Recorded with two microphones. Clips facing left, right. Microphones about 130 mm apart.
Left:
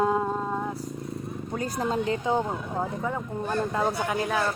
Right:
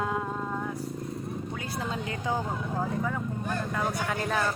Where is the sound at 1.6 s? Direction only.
40° left (ahead or behind).